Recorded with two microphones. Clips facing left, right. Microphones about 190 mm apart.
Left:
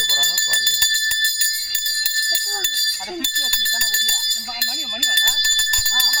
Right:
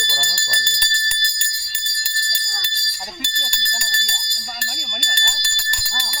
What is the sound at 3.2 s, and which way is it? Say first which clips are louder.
Speech: right 1 dB; 5° left (ahead or behind).